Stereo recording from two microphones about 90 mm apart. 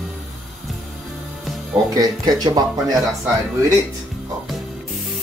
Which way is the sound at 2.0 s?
45° right (ahead or behind).